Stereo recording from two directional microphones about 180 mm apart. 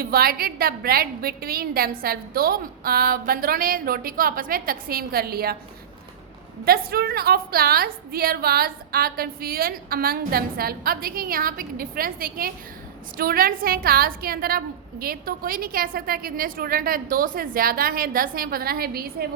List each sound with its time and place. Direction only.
0.0 s a woman's voice: 55° right (ahead or behind)
6.7 s a woman's voice: 60° right (ahead or behind)